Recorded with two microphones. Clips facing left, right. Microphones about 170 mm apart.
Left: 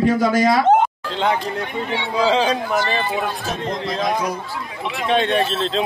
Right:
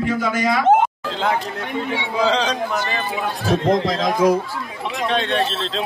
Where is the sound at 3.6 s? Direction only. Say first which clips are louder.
Right 4 dB; 90° right.